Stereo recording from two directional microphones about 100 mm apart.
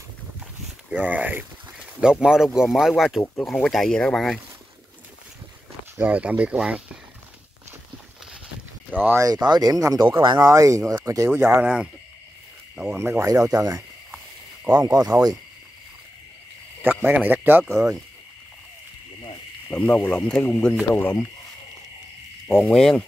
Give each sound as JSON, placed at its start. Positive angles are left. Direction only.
{"t": 0.9, "sound": "speech", "side_deg": -15}
{"t": 5.9, "sound": "speech", "side_deg": -15}
{"t": 8.9, "sound": "speech", "side_deg": -20}
{"t": 9.2, "sound": "speech", "side_deg": -40}
{"t": 10.5, "sound": "speech", "side_deg": -30}
{"t": 11.6, "sound": "speech", "side_deg": -10}
{"t": 13.2, "sound": "speech", "side_deg": -30}
{"t": 14.1, "sound": "snake", "side_deg": -15}
{"t": 14.8, "sound": "speech", "side_deg": -40}
{"t": 16.8, "sound": "speech", "side_deg": -20}
{"t": 17.6, "sound": "speech", "side_deg": -30}
{"t": 19.7, "sound": "speech", "side_deg": 15}
{"t": 22.6, "sound": "speech", "side_deg": 5}